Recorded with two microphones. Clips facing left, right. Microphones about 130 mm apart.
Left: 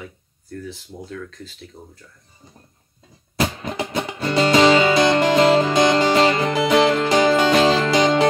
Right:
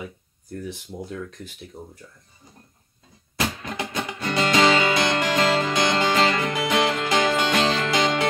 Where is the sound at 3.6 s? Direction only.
25° left (ahead or behind).